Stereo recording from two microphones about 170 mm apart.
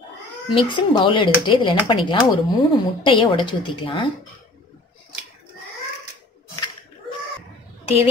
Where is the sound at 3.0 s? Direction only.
30° left (ahead or behind).